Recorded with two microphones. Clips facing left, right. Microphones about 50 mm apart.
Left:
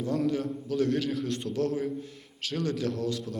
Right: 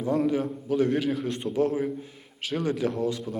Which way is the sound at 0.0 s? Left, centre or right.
Centre.